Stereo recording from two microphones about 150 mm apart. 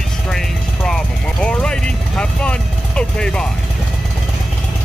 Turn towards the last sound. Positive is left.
turn(degrees=5)  # may be behind; listen again after turning